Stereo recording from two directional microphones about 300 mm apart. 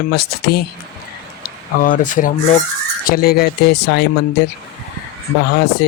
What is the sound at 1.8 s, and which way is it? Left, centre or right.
Speech, left.